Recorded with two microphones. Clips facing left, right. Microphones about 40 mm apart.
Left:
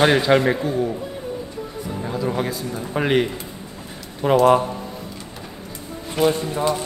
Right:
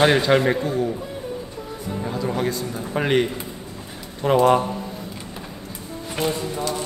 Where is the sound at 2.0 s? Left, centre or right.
Centre.